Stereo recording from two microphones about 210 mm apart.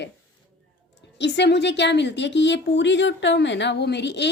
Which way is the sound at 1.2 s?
55° left (ahead or behind).